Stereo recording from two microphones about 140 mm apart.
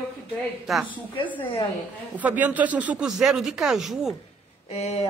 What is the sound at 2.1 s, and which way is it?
Speech, 10° right (ahead or behind).